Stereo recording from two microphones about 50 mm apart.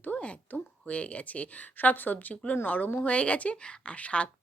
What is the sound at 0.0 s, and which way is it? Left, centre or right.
A woman's voice, left.